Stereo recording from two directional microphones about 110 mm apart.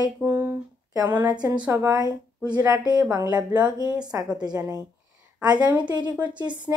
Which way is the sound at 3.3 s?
15° right (ahead or behind).